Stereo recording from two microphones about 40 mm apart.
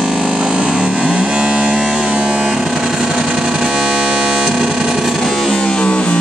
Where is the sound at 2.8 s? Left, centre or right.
Centre.